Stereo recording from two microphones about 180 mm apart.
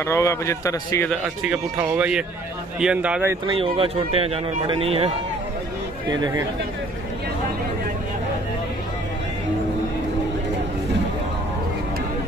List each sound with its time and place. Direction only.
0.0 s a man's voice: 15° left (ahead or behind)
1.0 s speech: 5° right (ahead or behind)
3.4 s speech: 30° right (ahead or behind)
6.0 s speech: 20° right (ahead or behind)